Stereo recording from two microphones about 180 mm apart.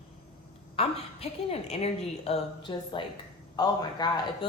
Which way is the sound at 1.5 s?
35° left (ahead or behind).